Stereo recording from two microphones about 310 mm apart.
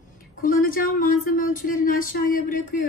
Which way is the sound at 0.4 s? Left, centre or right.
Left.